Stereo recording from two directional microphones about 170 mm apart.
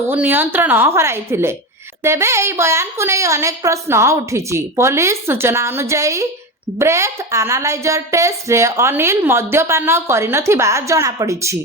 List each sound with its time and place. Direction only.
0.1 s a woman's voice: 10° right (ahead or behind)